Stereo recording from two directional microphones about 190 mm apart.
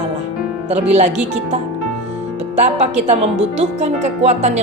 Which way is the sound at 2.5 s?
35° right (ahead or behind).